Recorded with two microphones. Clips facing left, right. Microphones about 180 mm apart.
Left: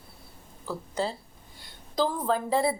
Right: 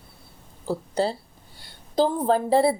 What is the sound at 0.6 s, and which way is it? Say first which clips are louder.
A woman's voice: right 6 dB; 30° right (ahead or behind).